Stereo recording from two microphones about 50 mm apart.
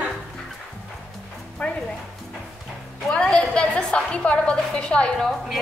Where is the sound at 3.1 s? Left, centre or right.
Centre.